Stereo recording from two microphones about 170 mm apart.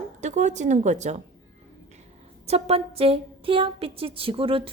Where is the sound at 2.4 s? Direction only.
35° right (ahead or behind).